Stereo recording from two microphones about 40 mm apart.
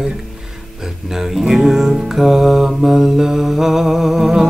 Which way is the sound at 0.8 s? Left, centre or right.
Centre.